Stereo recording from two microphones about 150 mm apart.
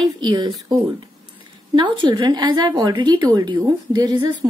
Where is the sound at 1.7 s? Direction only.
30° right (ahead or behind).